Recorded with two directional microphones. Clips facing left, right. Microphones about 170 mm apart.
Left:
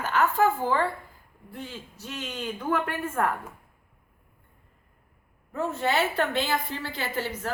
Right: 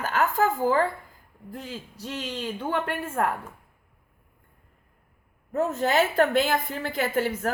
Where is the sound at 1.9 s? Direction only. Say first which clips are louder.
Right 3 dB; 30° right (ahead or behind).